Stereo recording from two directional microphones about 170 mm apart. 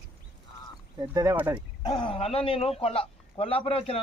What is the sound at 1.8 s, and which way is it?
A man's voice, 25° left (ahead or behind).